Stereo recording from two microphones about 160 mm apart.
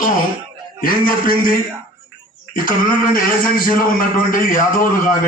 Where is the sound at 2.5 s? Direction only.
60° left (ahead or behind).